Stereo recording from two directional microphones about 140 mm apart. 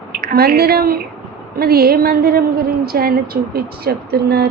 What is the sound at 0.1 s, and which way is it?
A woman's voice, 90° right.